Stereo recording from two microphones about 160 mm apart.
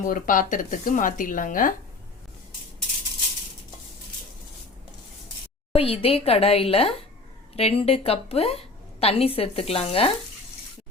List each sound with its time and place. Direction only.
0.0 s speech: 60° left (ahead or behind)
5.7 s a woman's voice: 35° left (ahead or behind)